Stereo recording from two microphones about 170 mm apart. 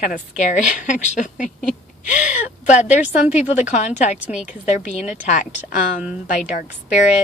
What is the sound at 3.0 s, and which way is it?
Speech, 10° right (ahead or behind).